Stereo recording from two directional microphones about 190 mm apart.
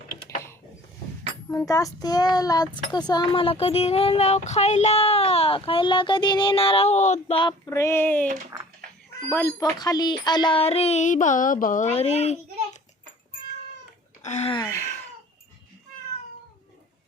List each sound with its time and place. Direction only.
1.5 s a child's voice: 15° left (ahead or behind); by 12.4 s 35° left (ahead or behind)
14.3 s speech: 35° left (ahead or behind)
14.5 s a sound: 15° left (ahead or behind)